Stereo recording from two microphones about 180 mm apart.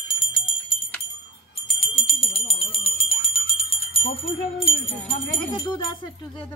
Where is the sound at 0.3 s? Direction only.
30° left (ahead or behind).